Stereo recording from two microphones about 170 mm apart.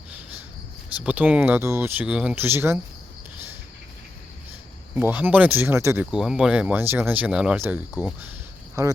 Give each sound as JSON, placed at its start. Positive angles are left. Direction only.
{"t": 0.9, "sound": "speech", "side_deg": -10}
{"t": 4.9, "sound": "speech", "side_deg": -10}
{"t": 6.1, "sound": "speech", "side_deg": -5}